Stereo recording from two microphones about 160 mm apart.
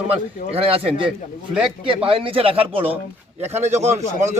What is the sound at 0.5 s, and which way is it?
Speech, 35° right (ahead or behind).